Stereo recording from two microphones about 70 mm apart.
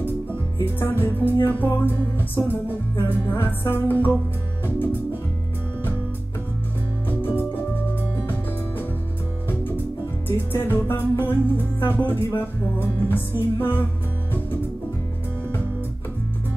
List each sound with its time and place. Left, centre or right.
0.7 s music: left
7.1 s music: left
10.2 s music: left